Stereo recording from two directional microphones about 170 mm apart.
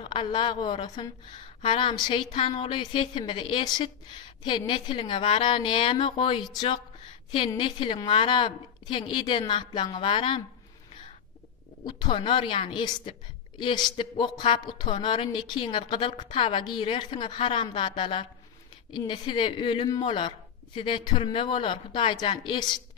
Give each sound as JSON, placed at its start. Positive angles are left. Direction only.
{"t": 0.0, "sound": "a woman's voice", "side_deg": 30}
{"t": 11.8, "sound": "a woman's voice", "side_deg": 30}